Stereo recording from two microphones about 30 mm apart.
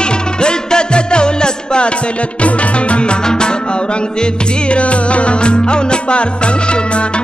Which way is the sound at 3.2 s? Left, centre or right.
Left.